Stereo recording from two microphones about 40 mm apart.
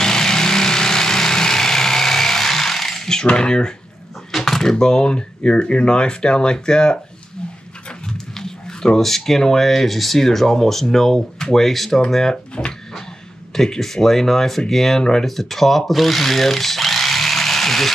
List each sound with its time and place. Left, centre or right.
0.0 s vehicle: centre
3.3 s speech: left
4.3 s speech: centre
8.1 s speech: centre
12.6 s speech: left
13.6 s speech: centre